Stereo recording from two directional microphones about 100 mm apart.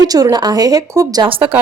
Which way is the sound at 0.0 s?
40° right (ahead or behind).